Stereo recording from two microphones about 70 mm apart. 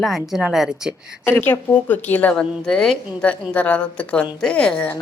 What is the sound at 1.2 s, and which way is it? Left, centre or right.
Speech, left.